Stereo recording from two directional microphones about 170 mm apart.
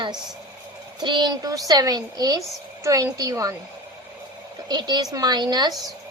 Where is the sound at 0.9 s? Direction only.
25° right (ahead or behind).